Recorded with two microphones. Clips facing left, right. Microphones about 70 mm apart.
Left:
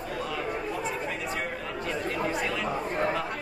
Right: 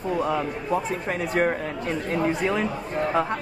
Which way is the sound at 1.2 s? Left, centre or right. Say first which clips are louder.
Right 9 dB; right.